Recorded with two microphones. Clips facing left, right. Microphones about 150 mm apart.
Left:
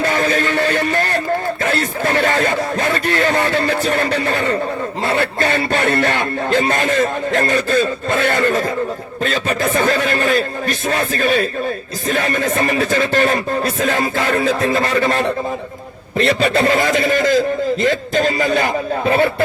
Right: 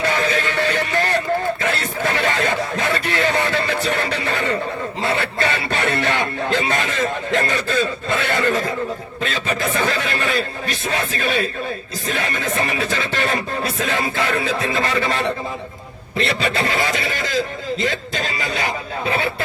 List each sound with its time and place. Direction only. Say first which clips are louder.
0.0 s music: left 3 dB; 45° left (ahead or behind)
1.6 s speech: left 3 dB; 45° left (ahead or behind)